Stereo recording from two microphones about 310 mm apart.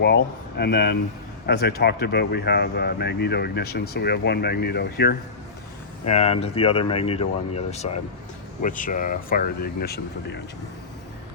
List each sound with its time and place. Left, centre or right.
0.0 s speech: left
6.1 s speech: left